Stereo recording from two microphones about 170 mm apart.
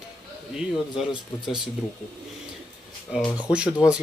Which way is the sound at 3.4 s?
5° right (ahead or behind).